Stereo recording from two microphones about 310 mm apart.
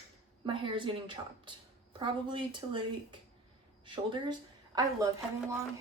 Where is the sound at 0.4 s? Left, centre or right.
Centre.